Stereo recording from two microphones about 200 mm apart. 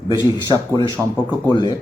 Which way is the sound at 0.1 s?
20° left (ahead or behind).